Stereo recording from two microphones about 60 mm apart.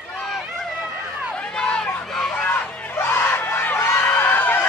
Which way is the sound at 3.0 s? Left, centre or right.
Left.